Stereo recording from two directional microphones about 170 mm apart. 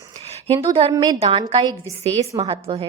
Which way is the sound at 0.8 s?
30° right (ahead or behind).